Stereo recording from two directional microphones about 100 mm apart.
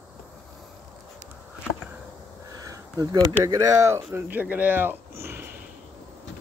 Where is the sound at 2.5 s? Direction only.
35° right (ahead or behind).